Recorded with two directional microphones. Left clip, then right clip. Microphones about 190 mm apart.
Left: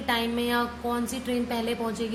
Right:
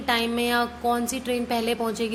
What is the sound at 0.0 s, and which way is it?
A woman's voice, 30° right (ahead or behind).